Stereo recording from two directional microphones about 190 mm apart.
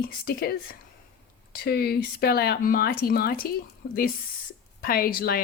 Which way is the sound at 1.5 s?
55° left (ahead or behind).